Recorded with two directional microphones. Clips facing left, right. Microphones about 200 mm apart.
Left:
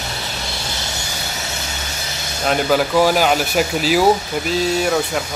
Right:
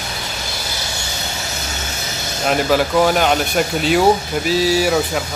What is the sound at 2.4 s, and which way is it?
Speech, centre (ahead or behind).